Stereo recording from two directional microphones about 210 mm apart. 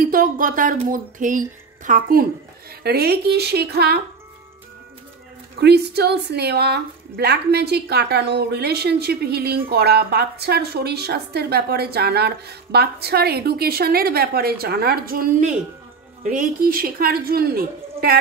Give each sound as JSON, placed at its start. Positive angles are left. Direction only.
{"t": 0.0, "sound": "a woman's voice", "side_deg": -40}
{"t": 5.6, "sound": "a woman's voice", "side_deg": -50}